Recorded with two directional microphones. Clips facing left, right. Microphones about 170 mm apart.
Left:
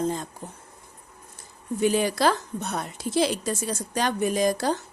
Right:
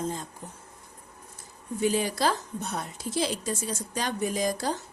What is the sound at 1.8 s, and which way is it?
A woman's voice, 70° left (ahead or behind).